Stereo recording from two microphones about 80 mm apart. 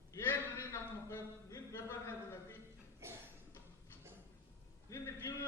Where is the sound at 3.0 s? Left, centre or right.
Right.